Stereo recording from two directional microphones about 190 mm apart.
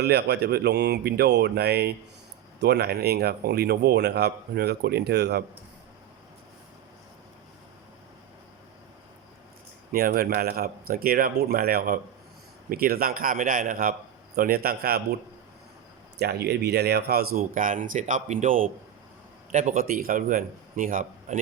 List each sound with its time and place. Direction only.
0.0 s speech: 60° right (ahead or behind)
9.9 s speech: 50° right (ahead or behind)
16.1 s speech: 55° right (ahead or behind)